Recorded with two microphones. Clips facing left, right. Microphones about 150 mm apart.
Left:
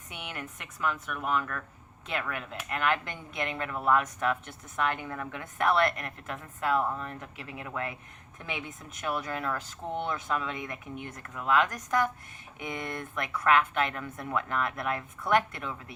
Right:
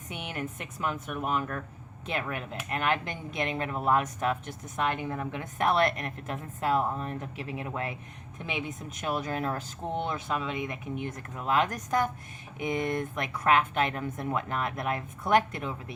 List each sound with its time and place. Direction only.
0.3 s a woman's voice: 30° right (ahead or behind)
10.3 s speech: 15° right (ahead or behind)
11.0 s a woman's voice: 25° right (ahead or behind)